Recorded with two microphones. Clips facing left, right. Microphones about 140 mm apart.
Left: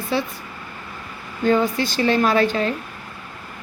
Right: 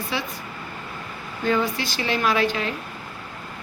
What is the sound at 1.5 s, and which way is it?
Speech, 45° left (ahead or behind).